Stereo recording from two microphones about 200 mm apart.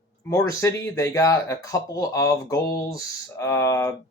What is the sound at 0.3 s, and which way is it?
Speech, 15° left (ahead or behind).